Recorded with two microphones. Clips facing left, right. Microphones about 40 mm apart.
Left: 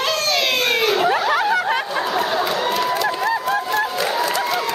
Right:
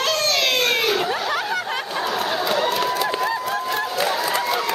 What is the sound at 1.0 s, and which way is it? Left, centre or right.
Snicker, centre.